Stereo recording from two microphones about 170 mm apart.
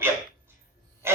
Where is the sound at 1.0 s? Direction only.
15° right (ahead or behind).